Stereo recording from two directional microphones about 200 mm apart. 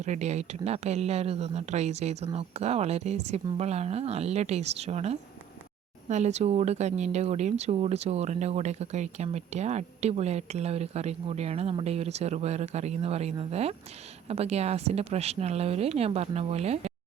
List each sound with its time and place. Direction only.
0.0 s speech: 35° right (ahead or behind)